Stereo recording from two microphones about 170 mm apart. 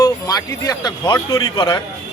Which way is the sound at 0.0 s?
20° left (ahead or behind).